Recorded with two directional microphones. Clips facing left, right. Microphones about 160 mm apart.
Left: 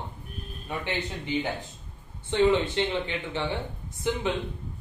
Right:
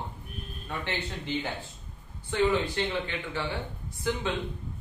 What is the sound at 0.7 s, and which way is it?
A man's voice, 15° left (ahead or behind).